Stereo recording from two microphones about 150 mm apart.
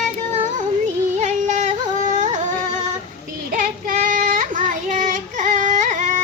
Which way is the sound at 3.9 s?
60° right (ahead or behind).